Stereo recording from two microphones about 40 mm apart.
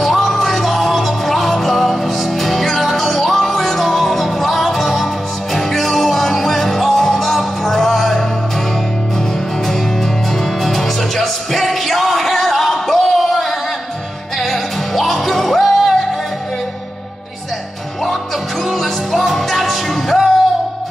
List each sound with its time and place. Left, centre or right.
0.0 s music: centre
10.6 s music: centre
18.7 s music: centre